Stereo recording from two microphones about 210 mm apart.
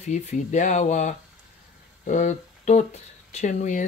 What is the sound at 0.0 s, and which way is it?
Speech, 35° left (ahead or behind).